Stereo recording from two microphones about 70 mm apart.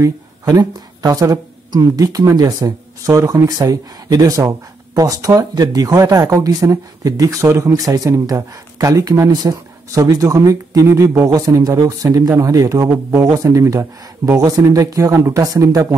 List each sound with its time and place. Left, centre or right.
0.5 s speech: right
5.5 s speech: right
7.4 s speech: right
7.7 s speech: right
9.3 s speech: right
10.9 s speech: right
11.2 s speech: right
15.4 s speech: right